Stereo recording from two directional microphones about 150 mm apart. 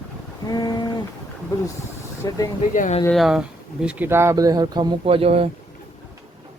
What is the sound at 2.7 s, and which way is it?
Speech, 60° left (ahead or behind).